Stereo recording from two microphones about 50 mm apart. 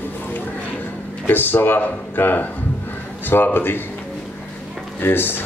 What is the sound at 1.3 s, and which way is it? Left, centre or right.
Speech, left.